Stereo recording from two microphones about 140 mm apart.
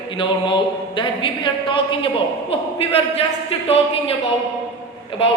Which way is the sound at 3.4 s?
45° left (ahead or behind).